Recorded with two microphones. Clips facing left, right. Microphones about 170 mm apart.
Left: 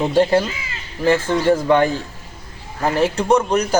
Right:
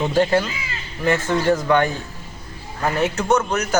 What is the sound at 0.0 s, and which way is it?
Speech, 30° left (ahead or behind).